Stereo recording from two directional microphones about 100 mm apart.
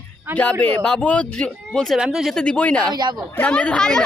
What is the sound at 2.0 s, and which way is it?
Speech, 5° right (ahead or behind).